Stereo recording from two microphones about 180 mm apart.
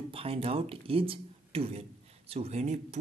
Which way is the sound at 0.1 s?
30° right (ahead or behind).